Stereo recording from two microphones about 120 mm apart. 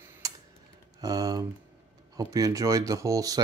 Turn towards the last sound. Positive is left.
turn(degrees=-30)  # may be behind; listen again after turning